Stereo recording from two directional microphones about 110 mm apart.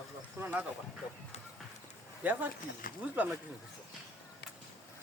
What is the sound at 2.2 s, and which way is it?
Speech, 15° right (ahead or behind).